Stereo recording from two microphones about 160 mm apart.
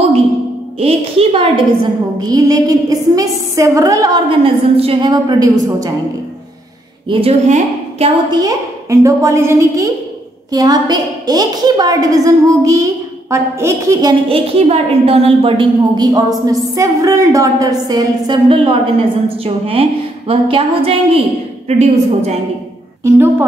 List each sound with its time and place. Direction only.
0.7 s a woman's voice: 35° right (ahead or behind)
2.1 s a woman's voice: 25° right (ahead or behind)
4.3 s a woman's voice: 35° right (ahead or behind)
7.1 s a woman's voice: 40° right (ahead or behind)
8.3 s a woman's voice: 25° right (ahead or behind)
14.1 s a woman's voice: 35° right (ahead or behind)
23.0 s a woman's voice: 15° right (ahead or behind)